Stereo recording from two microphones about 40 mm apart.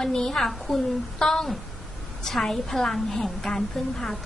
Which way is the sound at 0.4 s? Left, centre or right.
Centre.